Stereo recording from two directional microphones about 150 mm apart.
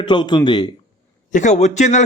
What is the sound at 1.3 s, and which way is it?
Speech, 55° left (ahead or behind).